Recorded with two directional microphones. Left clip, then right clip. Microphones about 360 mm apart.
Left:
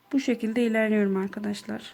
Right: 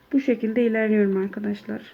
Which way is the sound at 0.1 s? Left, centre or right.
Left.